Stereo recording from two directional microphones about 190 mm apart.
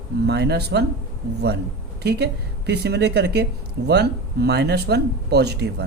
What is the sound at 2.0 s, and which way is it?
Speech, 60° right (ahead or behind).